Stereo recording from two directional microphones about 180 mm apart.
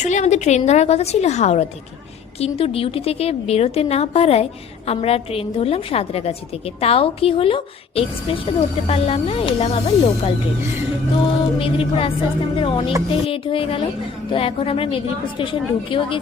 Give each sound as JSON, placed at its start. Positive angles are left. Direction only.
{"t": 0.0, "sound": "a woman's voice", "side_deg": 40}